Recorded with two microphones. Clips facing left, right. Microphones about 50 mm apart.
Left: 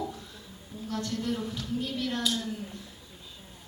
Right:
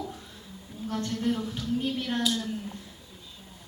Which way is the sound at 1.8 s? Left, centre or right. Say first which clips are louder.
Even; right.